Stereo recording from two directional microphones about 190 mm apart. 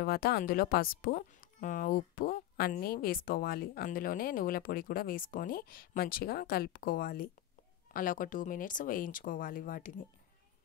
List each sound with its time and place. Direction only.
0.0 s speech: 55° left (ahead or behind)